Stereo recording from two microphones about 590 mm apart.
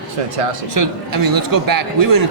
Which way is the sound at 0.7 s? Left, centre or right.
Right.